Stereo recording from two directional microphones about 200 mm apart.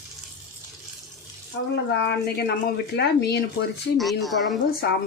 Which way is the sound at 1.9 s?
55° left (ahead or behind).